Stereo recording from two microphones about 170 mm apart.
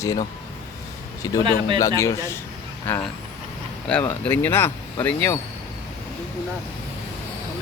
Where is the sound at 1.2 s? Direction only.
20° left (ahead or behind).